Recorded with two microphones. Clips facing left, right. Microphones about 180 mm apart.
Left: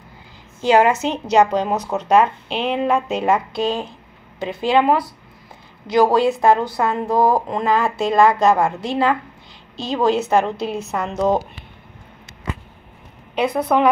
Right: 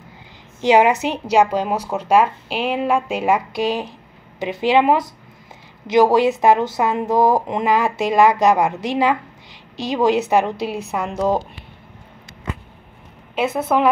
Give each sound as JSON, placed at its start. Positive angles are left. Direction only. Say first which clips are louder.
{"t": 0.6, "sound": "speech", "louder": "right 1 dB", "side_deg": -15}
{"t": 13.3, "sound": "a woman's voice", "louder": "left 1 dB", "side_deg": -5}